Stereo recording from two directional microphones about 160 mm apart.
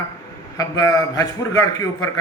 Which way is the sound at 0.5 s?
20° left (ahead or behind).